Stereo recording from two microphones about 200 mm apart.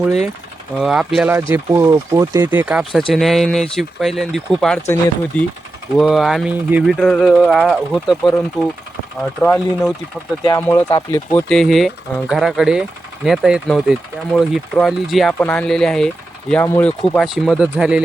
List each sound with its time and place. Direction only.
0.8 s speech: centre (ahead or behind)
10.8 s speech: 20° left (ahead or behind)
11.3 s speech: 5° left (ahead or behind)